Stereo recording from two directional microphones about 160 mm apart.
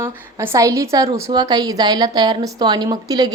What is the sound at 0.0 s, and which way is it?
A woman's voice, 20° right (ahead or behind).